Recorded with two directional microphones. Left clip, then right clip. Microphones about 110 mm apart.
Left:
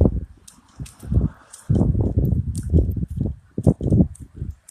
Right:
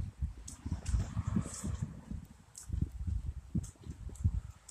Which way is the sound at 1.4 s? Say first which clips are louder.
Right 1 dB; centre (ahead or behind).